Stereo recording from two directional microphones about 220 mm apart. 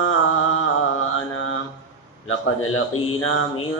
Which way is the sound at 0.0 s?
70° left (ahead or behind).